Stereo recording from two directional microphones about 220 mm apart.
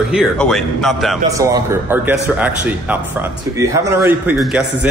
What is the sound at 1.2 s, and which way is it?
Speech, 15° right (ahead or behind).